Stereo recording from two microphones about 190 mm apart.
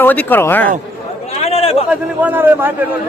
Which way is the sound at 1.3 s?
35° left (ahead or behind).